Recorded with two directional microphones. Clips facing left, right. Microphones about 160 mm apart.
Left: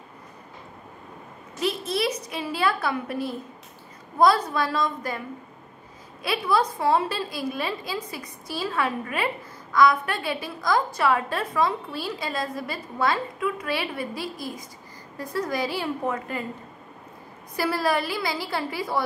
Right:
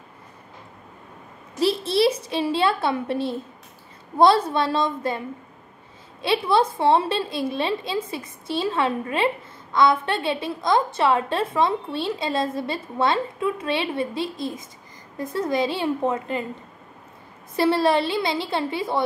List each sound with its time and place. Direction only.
1.6 s a woman's voice: 30° right (ahead or behind)
6.2 s a woman's voice: 25° right (ahead or behind)
17.6 s a woman's voice: 25° right (ahead or behind)